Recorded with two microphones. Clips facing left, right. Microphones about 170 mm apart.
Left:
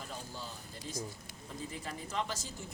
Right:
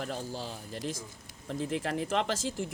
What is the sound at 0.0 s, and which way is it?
Speech, 85° right.